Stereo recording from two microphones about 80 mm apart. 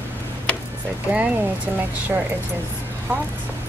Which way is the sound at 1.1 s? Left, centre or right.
Right.